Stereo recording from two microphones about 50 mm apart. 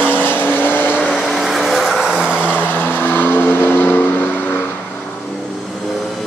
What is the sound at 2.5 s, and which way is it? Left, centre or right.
Vehicle, left.